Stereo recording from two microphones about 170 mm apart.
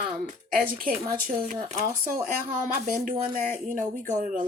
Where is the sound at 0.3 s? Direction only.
55° right (ahead or behind).